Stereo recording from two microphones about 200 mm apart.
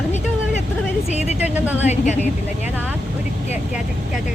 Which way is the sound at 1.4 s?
10° right (ahead or behind).